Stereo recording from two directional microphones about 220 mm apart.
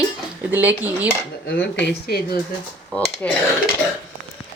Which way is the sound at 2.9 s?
5° left (ahead or behind).